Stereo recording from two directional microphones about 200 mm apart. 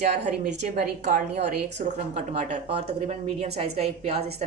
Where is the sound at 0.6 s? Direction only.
40° right (ahead or behind).